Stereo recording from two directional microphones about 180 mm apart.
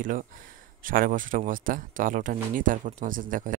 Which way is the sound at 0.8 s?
50° right (ahead or behind).